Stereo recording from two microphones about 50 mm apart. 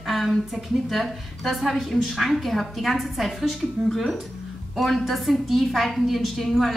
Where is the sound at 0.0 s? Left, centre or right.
Centre.